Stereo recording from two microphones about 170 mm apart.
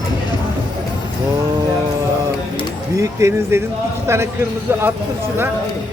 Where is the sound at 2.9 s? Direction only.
15° right (ahead or behind).